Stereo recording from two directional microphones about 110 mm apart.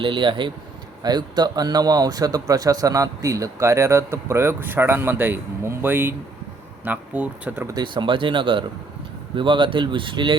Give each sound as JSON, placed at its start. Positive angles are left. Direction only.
{"t": 0.0, "sound": "speech", "side_deg": -50}
{"t": 7.7, "sound": "speech", "side_deg": -45}